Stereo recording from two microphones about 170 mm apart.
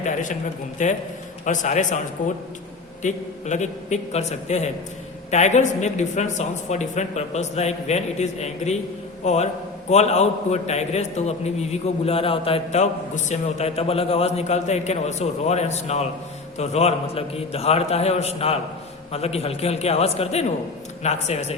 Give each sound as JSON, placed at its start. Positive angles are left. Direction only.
{"t": 0.0, "sound": "a woman's voice", "side_deg": 50}
{"t": 3.0, "sound": "a woman's voice", "side_deg": 45}